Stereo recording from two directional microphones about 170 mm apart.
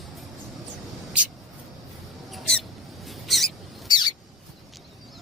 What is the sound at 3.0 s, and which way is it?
Rodents, centre (ahead or behind).